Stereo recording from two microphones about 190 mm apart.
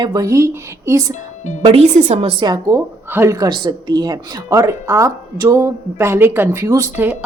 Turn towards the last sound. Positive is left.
turn(degrees=-15)  # may be behind; listen again after turning